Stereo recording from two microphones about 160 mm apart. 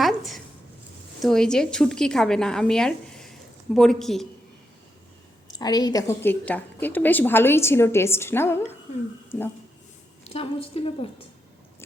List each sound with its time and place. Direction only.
0.0 s a sound: centre (ahead or behind)
1.2 s a woman's voice: 5° left (ahead or behind)
5.5 s a woman's voice: 25° left (ahead or behind)
10.2 s a woman's voice: 35° left (ahead or behind)